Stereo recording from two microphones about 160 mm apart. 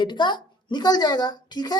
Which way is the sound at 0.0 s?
30° left (ahead or behind).